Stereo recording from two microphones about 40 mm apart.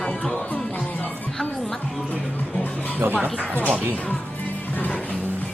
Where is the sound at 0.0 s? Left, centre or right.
Centre.